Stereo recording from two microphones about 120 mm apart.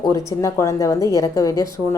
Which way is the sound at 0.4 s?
25° left (ahead or behind).